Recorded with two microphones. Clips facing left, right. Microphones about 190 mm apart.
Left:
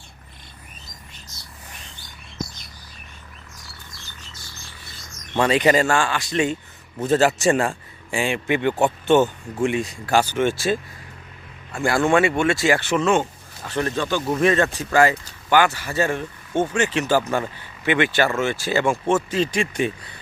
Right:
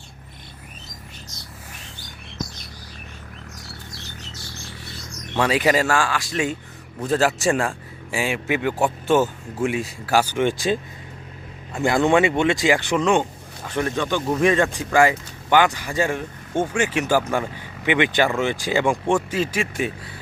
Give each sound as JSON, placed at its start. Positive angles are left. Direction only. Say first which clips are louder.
{"t": 5.4, "sound": "a man's voice", "louder": "left 2 dB", "side_deg": -5}